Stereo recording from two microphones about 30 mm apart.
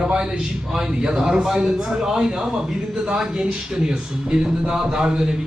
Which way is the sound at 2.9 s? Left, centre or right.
Right.